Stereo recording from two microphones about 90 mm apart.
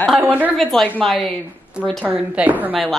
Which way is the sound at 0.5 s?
5° left (ahead or behind).